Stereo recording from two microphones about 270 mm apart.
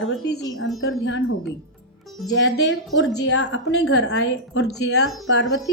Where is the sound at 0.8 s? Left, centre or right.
Left.